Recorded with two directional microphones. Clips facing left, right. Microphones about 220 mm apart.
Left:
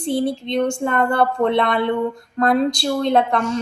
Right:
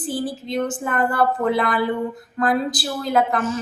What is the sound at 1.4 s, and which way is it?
Speech, 25° left (ahead or behind).